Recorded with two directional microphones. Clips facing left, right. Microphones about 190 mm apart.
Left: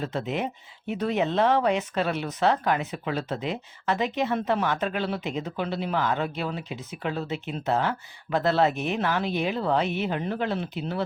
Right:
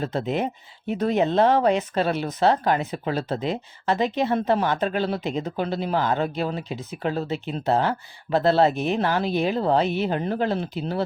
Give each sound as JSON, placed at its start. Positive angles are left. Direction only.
{"t": 0.0, "sound": "speech", "side_deg": -35}